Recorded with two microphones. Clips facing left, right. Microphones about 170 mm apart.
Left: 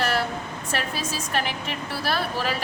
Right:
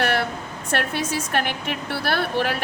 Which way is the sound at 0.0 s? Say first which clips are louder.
Right 2 dB; 60° right (ahead or behind).